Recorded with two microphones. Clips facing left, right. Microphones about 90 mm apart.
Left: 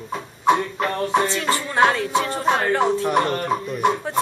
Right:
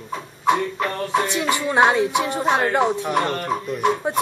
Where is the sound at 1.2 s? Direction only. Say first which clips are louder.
Right 1 dB; 15° right (ahead or behind).